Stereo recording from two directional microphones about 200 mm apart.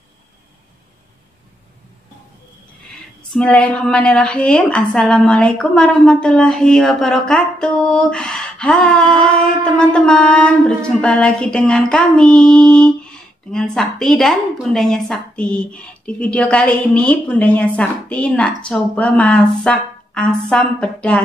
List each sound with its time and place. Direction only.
3.2 s female singing: 5° left (ahead or behind)